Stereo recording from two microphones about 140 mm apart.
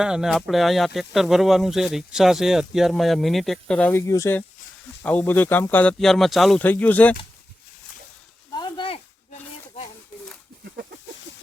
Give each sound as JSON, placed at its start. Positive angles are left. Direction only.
{"t": 0.0, "sound": "speech", "side_deg": -5}
{"t": 6.6, "sound": "speech", "side_deg": 10}
{"t": 8.5, "sound": "a sound", "side_deg": 35}